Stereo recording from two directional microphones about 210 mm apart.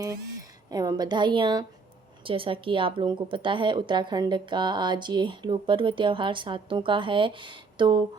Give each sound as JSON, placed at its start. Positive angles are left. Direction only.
{"t": 0.7, "sound": "a woman's voice", "side_deg": -20}